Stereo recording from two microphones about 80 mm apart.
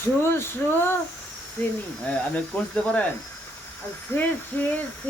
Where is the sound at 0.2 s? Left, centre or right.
Left.